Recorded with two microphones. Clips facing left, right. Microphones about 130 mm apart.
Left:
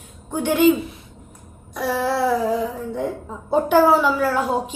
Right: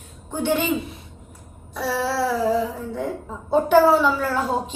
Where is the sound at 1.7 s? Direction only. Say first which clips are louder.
Left 2 dB; 15° left (ahead or behind).